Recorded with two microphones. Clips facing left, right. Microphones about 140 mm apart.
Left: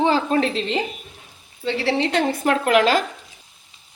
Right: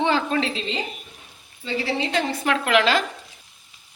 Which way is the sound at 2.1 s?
50° left (ahead or behind).